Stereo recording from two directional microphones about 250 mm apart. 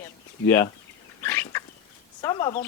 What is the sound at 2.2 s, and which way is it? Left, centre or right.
Speech, centre.